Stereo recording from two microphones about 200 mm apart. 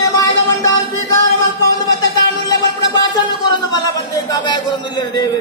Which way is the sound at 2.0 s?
20° left (ahead or behind).